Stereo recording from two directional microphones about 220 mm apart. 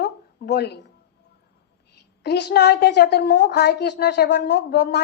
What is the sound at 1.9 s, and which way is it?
A woman's voice, 50° left (ahead or behind).